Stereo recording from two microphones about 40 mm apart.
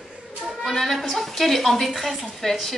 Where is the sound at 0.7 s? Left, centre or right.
Centre.